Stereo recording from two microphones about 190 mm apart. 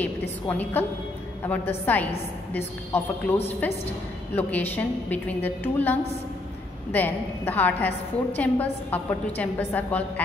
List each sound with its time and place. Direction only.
0.0 s a woman's voice: 10° left (ahead or behind)